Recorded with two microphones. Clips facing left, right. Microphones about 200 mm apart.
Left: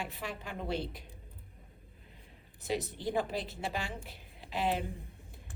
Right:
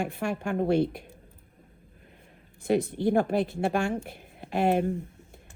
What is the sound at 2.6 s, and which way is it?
Speech, 55° right (ahead or behind).